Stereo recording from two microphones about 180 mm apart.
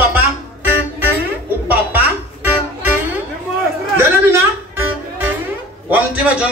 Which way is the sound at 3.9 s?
15° right (ahead or behind).